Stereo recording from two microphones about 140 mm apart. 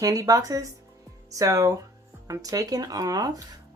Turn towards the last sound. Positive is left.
turn(degrees=-25)  # may be behind; listen again after turning